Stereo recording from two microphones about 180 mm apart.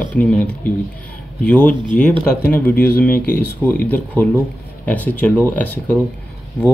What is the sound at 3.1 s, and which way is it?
Speech, 50° left (ahead or behind).